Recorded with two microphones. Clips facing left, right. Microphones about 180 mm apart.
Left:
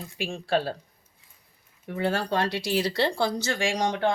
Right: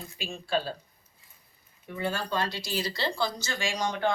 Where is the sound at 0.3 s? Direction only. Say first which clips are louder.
Left 4 dB; 70° left (ahead or behind).